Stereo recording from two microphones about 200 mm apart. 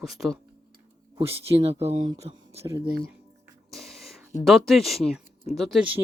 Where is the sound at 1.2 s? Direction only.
30° right (ahead or behind).